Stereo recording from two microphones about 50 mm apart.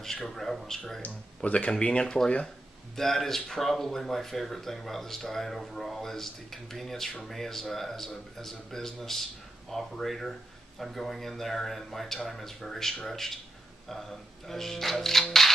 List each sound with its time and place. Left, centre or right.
0.0 s speech: centre
1.0 s speech: left
3.0 s speech: centre